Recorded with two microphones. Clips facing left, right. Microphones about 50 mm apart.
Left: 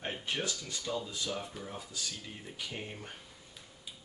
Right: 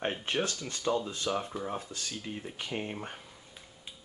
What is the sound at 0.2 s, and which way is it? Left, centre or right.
Speech, right.